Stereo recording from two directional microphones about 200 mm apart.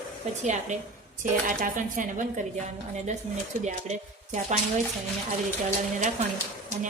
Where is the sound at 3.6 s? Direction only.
35° right (ahead or behind).